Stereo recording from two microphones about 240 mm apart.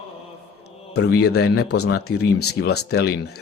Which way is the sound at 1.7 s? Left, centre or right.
Left.